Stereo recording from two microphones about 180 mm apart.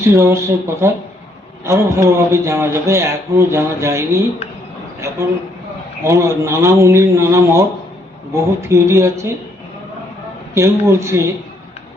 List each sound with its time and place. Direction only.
0.0 s a man's voice: 15° right (ahead or behind)
10.5 s a man's voice: 15° right (ahead or behind)